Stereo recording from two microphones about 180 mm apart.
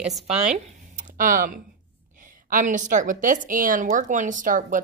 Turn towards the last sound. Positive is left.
turn(degrees=-50)  # may be behind; listen again after turning